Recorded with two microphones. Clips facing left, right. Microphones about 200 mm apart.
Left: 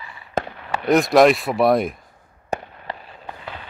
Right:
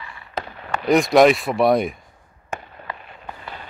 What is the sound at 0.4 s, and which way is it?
Fireworks, 50° left (ahead or behind).